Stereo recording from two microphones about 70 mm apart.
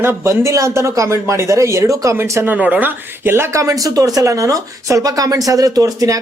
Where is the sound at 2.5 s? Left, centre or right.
Right.